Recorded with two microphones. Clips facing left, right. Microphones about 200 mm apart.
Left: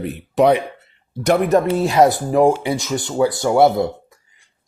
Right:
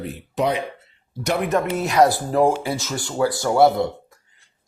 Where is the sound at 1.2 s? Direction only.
50° left (ahead or behind).